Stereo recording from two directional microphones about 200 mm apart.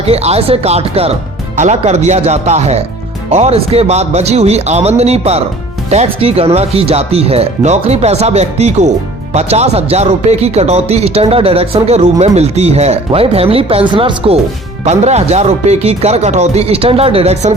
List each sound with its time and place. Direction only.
0.1 s speech: 30° right (ahead or behind)